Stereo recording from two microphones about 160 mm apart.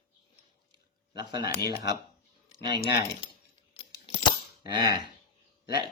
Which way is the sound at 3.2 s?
30° left (ahead or behind).